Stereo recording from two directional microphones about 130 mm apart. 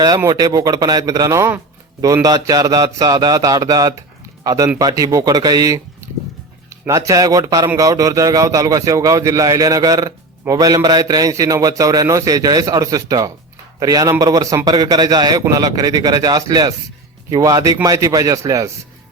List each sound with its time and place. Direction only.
0.3 s a man's voice: 30° right (ahead or behind)